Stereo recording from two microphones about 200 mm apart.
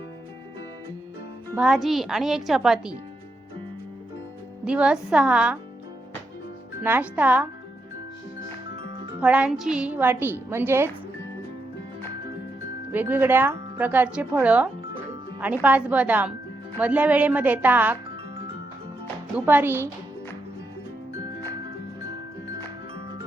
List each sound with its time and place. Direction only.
1.5 s speech: centre (ahead or behind)
4.6 s speech: 5° right (ahead or behind)
6.8 s speech: 10° right (ahead or behind)
8.7 s music: 25° right (ahead or behind)
9.2 s speech: 5° right (ahead or behind)
12.9 s speech: 10° right (ahead or behind)
19.5 s speech: 10° right (ahead or behind)